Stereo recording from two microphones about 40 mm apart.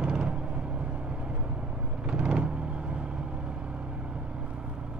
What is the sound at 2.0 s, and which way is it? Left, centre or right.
Vehicle, right.